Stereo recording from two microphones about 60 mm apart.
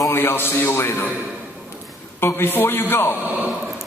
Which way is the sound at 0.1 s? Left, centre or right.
Left.